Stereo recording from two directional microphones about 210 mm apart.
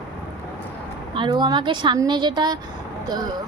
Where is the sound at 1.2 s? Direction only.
20° right (ahead or behind).